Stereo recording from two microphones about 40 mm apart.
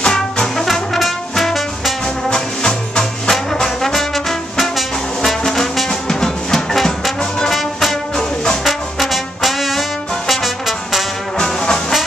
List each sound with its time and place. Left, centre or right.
0.0 s brass instrument: left
1.3 s music: centre
2.2 s brass instrument: centre
4.6 s music: centre
8.6 s brass instrument: centre
11.3 s brass instrument: centre